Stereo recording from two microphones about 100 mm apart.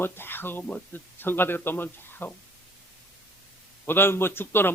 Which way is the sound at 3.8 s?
20° left (ahead or behind).